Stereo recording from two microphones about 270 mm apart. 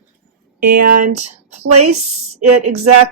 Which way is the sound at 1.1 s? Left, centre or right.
Right.